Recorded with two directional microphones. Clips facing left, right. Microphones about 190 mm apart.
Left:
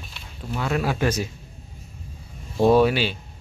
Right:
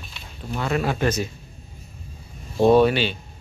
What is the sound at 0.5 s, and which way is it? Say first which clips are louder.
Speech: right 1 dB; 5° left (ahead or behind).